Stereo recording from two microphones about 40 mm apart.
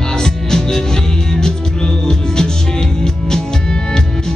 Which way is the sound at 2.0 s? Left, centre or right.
Centre.